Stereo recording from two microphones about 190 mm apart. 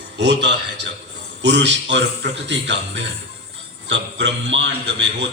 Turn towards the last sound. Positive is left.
turn(degrees=-65)  # may be behind; listen again after turning